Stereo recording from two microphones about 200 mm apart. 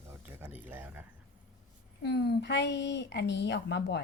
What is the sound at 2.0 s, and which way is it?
A woman's voice, 55° left (ahead or behind).